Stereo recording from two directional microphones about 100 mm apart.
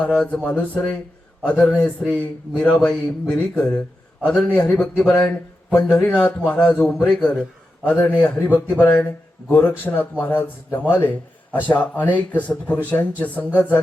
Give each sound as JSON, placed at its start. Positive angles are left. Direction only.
{"t": 0.0, "sound": "speech", "side_deg": 10}
{"t": 7.1, "sound": "a man's voice", "side_deg": 0}
{"t": 7.9, "sound": "a man's voice", "side_deg": 15}